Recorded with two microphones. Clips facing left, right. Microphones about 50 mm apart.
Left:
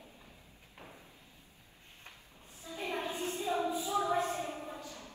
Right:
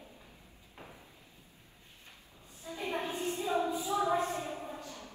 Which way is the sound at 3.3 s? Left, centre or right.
Right.